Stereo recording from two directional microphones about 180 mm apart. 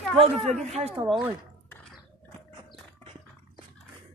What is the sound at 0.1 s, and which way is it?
Speech, centre (ahead or behind).